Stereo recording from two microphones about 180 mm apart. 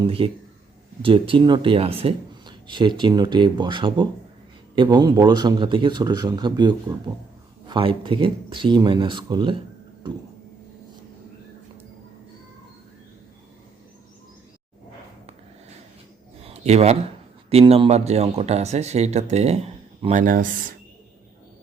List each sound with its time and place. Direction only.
0.0 s speech: 30° right (ahead or behind)
16.5 s a sound: 35° right (ahead or behind)
17.5 s speech: 35° right (ahead or behind); by 20.7 s 50° right (ahead or behind)